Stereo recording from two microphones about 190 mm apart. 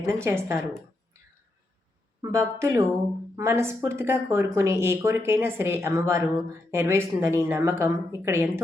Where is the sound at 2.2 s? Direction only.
15° right (ahead or behind).